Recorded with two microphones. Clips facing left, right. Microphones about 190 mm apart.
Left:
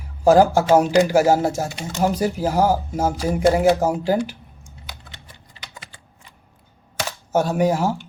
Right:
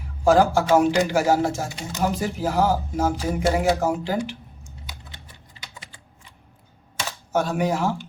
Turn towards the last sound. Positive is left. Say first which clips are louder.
# left 4 dB
turn(degrees=40)  # may be behind; listen again after turning